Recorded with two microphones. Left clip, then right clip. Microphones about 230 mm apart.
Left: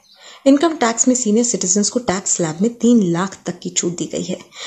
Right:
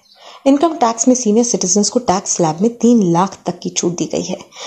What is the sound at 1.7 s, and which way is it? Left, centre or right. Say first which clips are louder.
Speech: right 3 dB; centre.